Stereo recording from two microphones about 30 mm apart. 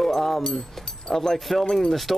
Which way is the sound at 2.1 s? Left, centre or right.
Centre.